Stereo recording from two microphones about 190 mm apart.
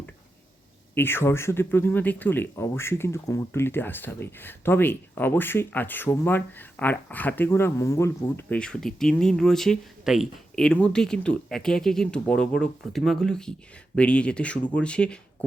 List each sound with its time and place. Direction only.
0.9 s speech: 10° left (ahead or behind)